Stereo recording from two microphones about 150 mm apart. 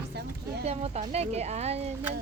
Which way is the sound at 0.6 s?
45° right (ahead or behind).